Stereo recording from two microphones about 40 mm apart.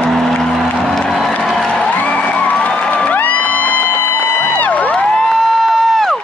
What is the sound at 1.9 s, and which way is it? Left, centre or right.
Music, left.